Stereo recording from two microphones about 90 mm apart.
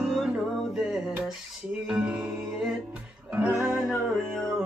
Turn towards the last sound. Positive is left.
turn(degrees=5)  # may be behind; listen again after turning